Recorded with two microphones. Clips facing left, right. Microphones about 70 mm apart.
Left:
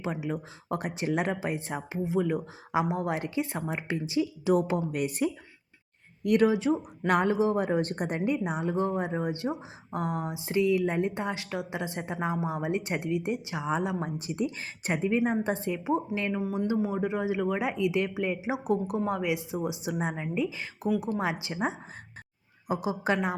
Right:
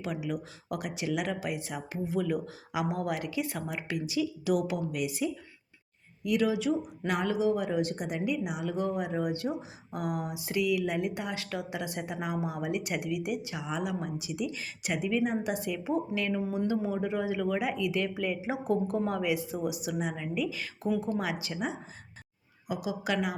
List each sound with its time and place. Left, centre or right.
0.0 s a woman's voice: left
22.7 s a woman's voice: left